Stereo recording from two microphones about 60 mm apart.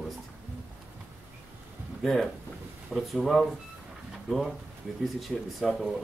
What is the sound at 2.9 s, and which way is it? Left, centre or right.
Speech, centre.